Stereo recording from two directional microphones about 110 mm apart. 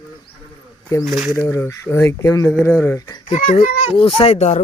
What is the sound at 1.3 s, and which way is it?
Speech, 25° left (ahead or behind).